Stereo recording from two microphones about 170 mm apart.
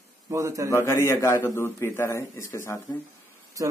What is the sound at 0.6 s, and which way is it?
A man's voice, 15° left (ahead or behind).